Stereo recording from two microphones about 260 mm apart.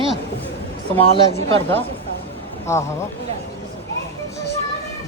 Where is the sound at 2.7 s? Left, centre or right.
Centre.